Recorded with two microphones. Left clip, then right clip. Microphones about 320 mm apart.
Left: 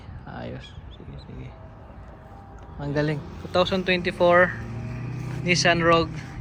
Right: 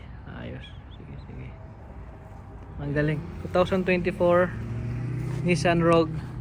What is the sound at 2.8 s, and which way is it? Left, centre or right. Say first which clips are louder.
Speech: left 1 dB; centre.